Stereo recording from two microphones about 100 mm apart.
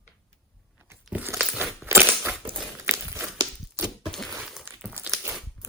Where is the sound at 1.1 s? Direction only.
15° right (ahead or behind).